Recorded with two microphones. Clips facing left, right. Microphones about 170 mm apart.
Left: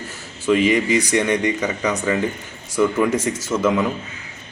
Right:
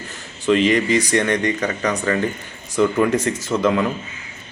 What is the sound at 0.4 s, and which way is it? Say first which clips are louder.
A man's voice: even; 10° left (ahead or behind).